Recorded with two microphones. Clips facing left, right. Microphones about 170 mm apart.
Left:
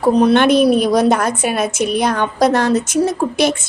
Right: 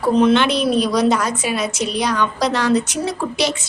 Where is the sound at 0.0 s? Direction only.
40° left (ahead or behind).